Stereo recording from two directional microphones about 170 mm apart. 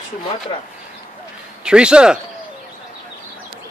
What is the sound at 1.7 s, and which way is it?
Speech, 5° right (ahead or behind).